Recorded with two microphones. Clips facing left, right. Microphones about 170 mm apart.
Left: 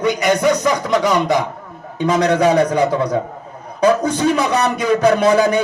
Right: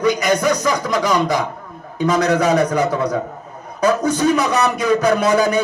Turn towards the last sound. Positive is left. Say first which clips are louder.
# left 2 dB
turn(degrees=30)  # may be behind; listen again after turning